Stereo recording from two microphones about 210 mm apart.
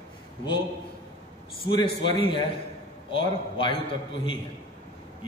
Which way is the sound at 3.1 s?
25° left (ahead or behind).